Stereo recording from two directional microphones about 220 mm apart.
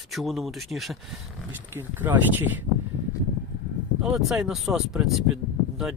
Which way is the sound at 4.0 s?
Centre (ahead or behind).